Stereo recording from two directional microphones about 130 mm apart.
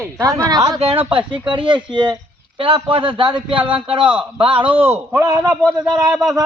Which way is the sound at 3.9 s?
40° right (ahead or behind).